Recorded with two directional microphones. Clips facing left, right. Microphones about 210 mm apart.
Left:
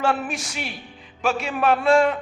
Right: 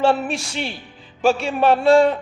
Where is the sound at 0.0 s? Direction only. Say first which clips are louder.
Right 5 dB; 30° right (ahead or behind).